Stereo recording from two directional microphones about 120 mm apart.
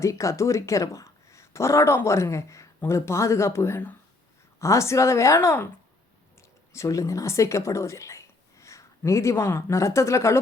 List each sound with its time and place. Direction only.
0.0 s speech: 25° left (ahead or behind)
6.7 s a woman's voice: 25° left (ahead or behind)